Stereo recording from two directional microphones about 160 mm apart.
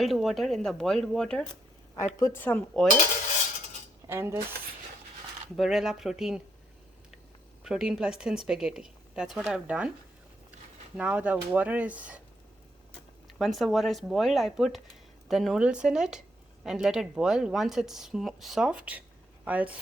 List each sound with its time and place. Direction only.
0.0 s speech: centre (ahead or behind)
2.1 s speech: 15° left (ahead or behind)
4.0 s cutlery: 15° right (ahead or behind)
5.5 s speech: centre (ahead or behind)
7.6 s speech: 5° right (ahead or behind)
10.9 s speech: 5° right (ahead or behind)
13.4 s speech: centre (ahead or behind)